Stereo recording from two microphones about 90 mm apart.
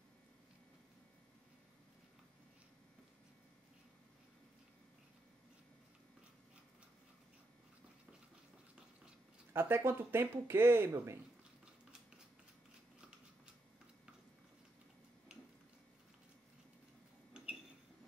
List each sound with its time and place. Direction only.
9.5 s speech: 25° right (ahead or behind)